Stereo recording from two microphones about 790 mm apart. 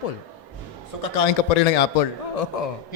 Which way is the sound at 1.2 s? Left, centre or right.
Left.